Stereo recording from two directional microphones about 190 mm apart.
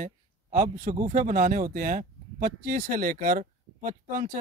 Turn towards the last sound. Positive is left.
turn(degrees=-45)  # may be behind; listen again after turning